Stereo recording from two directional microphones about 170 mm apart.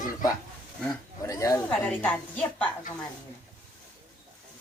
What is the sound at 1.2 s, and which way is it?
A woman's voice, 20° left (ahead or behind).